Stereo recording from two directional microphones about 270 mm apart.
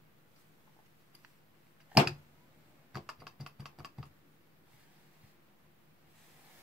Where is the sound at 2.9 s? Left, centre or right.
Centre.